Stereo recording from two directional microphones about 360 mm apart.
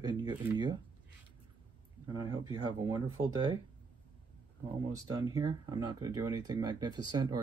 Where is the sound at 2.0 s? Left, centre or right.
Centre.